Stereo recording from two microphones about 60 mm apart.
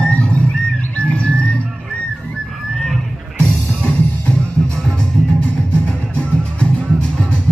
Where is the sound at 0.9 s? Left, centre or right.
Left.